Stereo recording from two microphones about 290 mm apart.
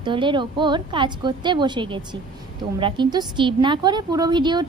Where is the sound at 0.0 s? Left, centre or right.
Centre.